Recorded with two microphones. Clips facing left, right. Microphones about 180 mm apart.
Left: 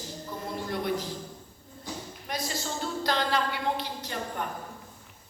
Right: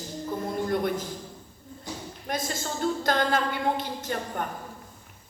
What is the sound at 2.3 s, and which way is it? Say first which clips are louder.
Speech: right 2 dB; 50° right (ahead or behind).